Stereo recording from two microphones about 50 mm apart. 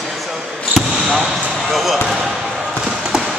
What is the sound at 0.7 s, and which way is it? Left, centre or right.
Basketball bounce, centre.